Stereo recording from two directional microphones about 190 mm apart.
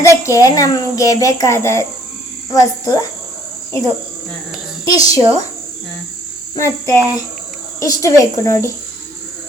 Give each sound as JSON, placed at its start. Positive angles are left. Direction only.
{"t": 0.0, "sound": "a child's voice", "side_deg": 15}
{"t": 4.9, "sound": "a child's voice", "side_deg": 15}
{"t": 6.6, "sound": "a child's voice", "side_deg": 15}